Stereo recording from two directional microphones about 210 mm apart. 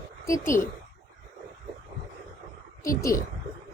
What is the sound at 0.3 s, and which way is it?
Speech, 15° left (ahead or behind).